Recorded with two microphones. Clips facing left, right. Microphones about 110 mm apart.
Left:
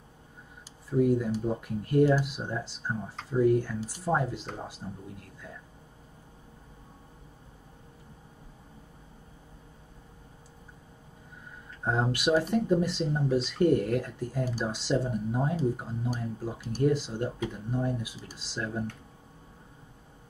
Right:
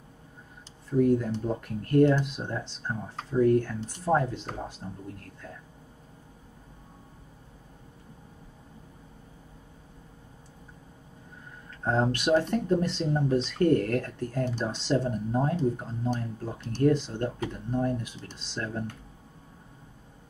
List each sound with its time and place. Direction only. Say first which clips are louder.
0.8 s speech: right 1 dB; 10° left (ahead or behind)
11.8 s speech: right 2 dB; 10° left (ahead or behind)